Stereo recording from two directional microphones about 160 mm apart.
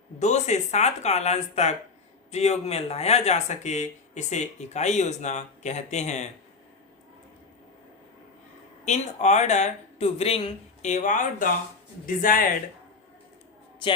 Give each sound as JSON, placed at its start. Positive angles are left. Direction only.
{"t": 0.2, "sound": "speech", "side_deg": 45}
{"t": 8.8, "sound": "speech", "side_deg": 45}